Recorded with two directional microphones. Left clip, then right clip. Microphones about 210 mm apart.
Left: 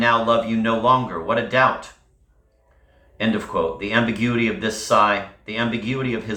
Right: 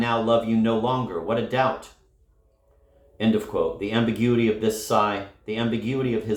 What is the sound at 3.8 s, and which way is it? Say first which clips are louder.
Speech: left 3 dB; 50° right (ahead or behind).